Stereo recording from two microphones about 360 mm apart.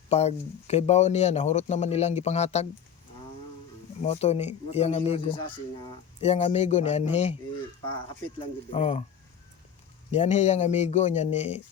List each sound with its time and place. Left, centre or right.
0.1 s speech: centre
4.0 s speech: centre
10.1 s speech: centre